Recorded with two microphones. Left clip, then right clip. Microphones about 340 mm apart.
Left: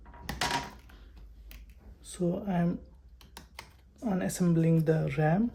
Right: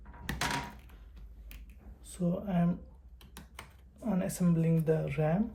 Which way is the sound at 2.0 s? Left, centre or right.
Left.